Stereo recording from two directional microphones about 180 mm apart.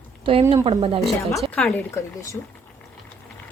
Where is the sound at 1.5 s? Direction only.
5° left (ahead or behind).